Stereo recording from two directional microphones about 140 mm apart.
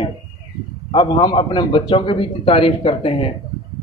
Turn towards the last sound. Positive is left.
turn(degrees=40)  # may be behind; listen again after turning